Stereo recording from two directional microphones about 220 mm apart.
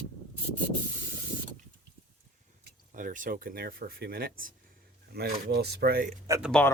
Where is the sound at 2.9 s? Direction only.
35° right (ahead or behind).